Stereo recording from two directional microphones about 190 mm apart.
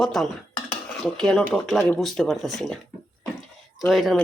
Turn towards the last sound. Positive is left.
turn(degrees=0)  # may be behind; listen again after turning